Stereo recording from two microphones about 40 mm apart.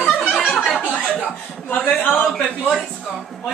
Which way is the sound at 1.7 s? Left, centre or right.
Left.